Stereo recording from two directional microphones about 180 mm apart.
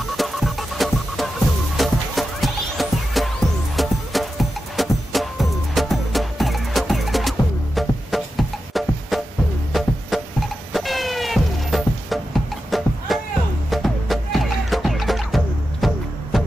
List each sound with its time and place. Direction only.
0.2 s music: centre (ahead or behind)